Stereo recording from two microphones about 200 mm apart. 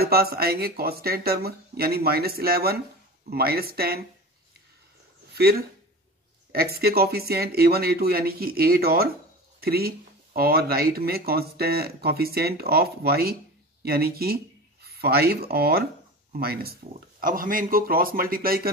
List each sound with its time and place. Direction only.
0.0 s speech: 50° right (ahead or behind)
5.3 s speech: 50° right (ahead or behind)